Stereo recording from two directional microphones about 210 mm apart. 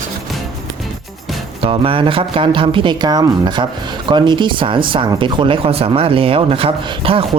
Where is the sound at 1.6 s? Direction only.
25° right (ahead or behind).